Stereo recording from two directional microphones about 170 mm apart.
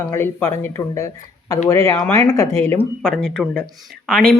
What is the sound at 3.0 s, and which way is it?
Speech, 5° left (ahead or behind).